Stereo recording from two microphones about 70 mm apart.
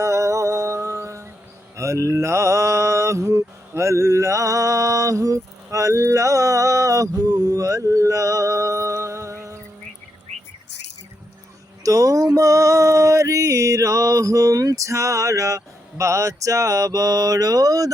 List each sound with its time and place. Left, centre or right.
0.0 s music: right
1.7 s mantra: right
11.8 s mantra: right